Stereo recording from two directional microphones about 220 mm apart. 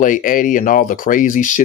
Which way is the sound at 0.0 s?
35° left (ahead or behind).